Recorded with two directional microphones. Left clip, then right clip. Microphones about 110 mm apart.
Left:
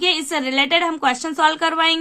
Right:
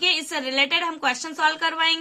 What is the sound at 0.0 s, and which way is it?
A woman's voice, 35° left (ahead or behind).